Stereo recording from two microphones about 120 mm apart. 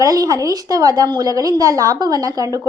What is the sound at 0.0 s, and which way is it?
Speech, 30° right (ahead or behind).